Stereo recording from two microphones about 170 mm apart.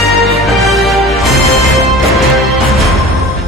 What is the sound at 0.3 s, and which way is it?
Music, centre (ahead or behind).